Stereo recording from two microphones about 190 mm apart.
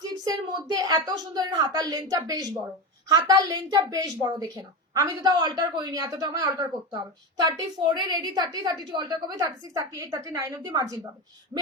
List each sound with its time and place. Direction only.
0.1 s a woman's voice: 20° right (ahead or behind)